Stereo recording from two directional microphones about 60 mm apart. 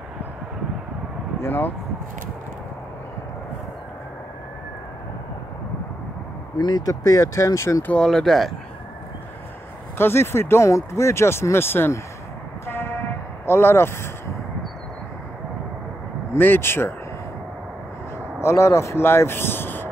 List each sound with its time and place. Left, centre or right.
1.4 s speech: left
6.8 s speech: left
8.0 s speech: centre
9.9 s speech: left
12.6 s vehicle: left
13.5 s speech: left
16.3 s speech: left
18.4 s speech: left